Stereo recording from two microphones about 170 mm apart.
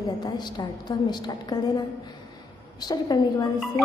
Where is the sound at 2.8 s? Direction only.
25° left (ahead or behind).